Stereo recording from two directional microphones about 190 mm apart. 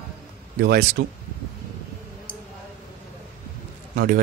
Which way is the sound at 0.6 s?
55° right (ahead or behind).